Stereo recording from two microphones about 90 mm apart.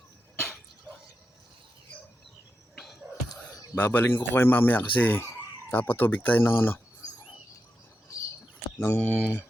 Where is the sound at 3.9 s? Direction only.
25° left (ahead or behind).